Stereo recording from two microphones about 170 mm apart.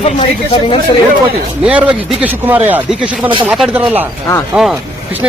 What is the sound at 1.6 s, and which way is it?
Speech, 5° right (ahead or behind).